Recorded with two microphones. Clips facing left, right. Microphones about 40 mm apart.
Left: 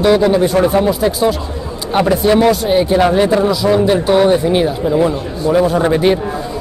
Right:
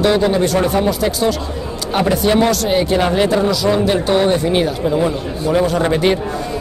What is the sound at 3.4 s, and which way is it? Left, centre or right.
Speech, centre.